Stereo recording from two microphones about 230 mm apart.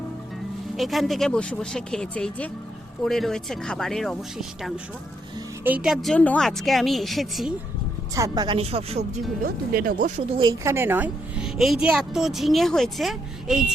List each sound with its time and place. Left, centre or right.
0.8 s speech: centre
8.1 s speech: centre
9.4 s speech: right
10.3 s speech: centre